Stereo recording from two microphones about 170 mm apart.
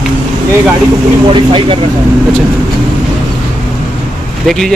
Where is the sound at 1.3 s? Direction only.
30° right (ahead or behind).